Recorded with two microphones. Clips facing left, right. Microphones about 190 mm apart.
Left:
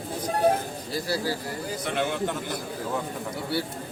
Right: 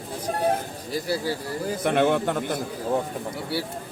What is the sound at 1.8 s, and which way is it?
Speech, 55° right (ahead or behind).